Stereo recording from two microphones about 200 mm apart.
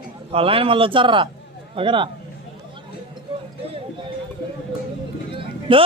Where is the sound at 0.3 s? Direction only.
30° right (ahead or behind).